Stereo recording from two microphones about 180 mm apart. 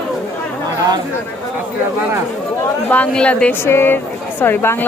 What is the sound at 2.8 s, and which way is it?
Speech, 10° left (ahead or behind).